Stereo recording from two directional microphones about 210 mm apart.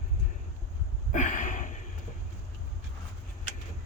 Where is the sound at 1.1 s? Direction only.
35° left (ahead or behind).